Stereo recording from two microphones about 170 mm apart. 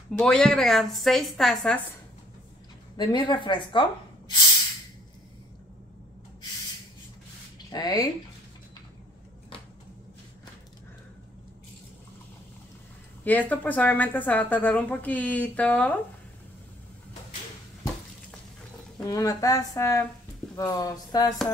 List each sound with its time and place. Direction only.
0.2 s a woman's voice: 5° left (ahead or behind)
3.0 s speech: 25° left (ahead or behind)
7.7 s speech: 20° left (ahead or behind)
13.2 s speech: 10° left (ahead or behind)
19.0 s speech: 20° left (ahead or behind)